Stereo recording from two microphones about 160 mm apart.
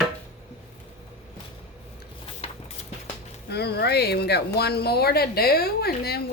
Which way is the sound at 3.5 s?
90° left.